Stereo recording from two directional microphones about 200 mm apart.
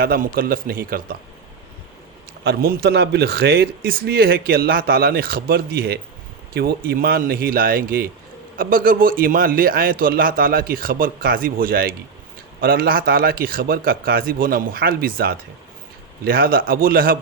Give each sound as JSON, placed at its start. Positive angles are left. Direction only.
{"t": 0.0, "sound": "speech", "side_deg": -45}
{"t": 2.4, "sound": "speech", "side_deg": -55}